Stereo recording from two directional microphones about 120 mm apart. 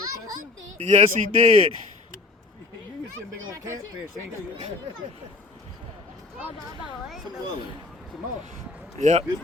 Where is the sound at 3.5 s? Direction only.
25° right (ahead or behind).